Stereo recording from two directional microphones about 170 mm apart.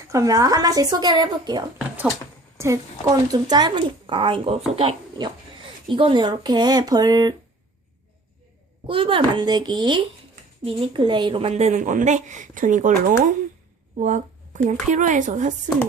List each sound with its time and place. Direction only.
0.1 s speech: 20° right (ahead or behind)
8.9 s a woman's voice: 30° right (ahead or behind)